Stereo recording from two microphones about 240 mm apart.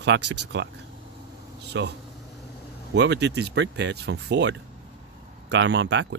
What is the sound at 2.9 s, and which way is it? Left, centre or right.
Speech, right.